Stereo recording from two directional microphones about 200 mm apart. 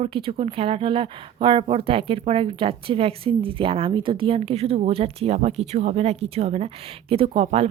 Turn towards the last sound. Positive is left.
turn(degrees=-30)  # may be behind; listen again after turning